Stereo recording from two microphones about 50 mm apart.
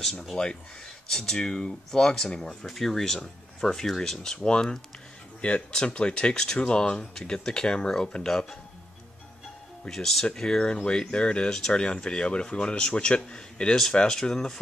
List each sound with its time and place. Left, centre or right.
0.2 s speech: centre
2.6 s speech: centre
9.8 s speech: centre